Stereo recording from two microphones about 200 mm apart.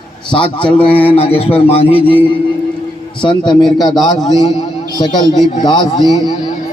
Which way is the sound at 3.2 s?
20° left (ahead or behind).